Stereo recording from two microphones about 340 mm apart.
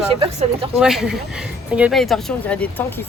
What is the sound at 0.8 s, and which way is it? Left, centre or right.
Speech, centre.